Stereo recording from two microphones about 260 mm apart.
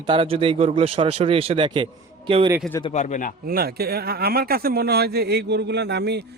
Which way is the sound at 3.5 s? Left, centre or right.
Right.